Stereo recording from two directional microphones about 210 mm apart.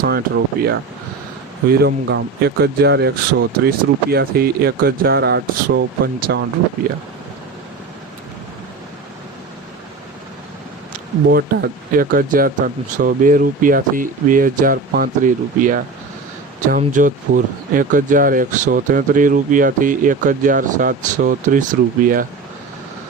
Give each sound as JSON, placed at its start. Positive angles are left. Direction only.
{"t": 0.0, "sound": "speech", "side_deg": -50}
{"t": 1.8, "sound": "speech", "side_deg": -55}
{"t": 11.3, "sound": "speech", "side_deg": -45}